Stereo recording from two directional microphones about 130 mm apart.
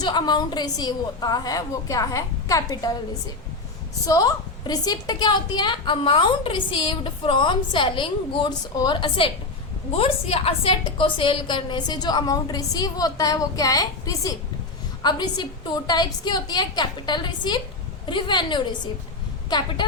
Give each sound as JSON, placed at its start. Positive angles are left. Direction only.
{"t": 0.0, "sound": "a woman's voice", "side_deg": 35}